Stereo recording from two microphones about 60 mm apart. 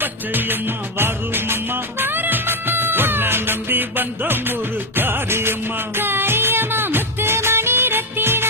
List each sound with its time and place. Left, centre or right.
0.0 s music: right